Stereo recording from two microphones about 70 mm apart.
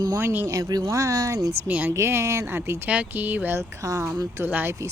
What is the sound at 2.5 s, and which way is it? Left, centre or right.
Speech, right.